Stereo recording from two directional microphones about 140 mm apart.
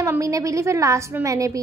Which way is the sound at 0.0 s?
25° right (ahead or behind).